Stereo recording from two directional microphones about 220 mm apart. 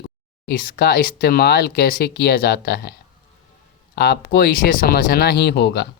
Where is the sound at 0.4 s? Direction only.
40° left (ahead or behind).